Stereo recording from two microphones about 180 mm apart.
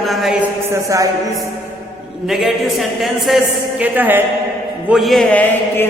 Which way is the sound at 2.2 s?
Centre (ahead or behind).